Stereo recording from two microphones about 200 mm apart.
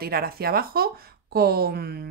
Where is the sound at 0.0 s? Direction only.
50° right (ahead or behind).